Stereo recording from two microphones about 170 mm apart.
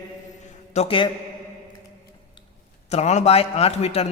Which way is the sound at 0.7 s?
35° left (ahead or behind).